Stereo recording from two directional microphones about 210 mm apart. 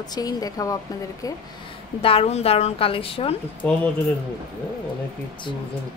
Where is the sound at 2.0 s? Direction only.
30° left (ahead or behind).